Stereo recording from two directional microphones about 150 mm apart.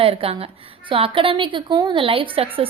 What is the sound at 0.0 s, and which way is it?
A woman's voice, 40° right (ahead or behind).